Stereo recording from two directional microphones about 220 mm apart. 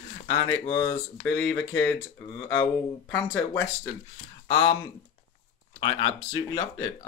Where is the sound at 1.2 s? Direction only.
5° left (ahead or behind).